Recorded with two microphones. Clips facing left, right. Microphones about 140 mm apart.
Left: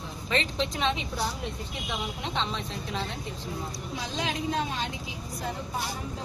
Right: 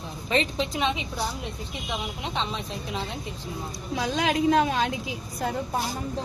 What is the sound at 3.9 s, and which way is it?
A woman's voice, 80° right.